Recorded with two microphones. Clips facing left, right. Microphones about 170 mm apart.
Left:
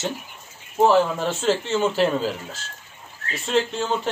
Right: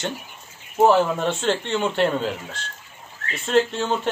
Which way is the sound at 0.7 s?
Centre (ahead or behind).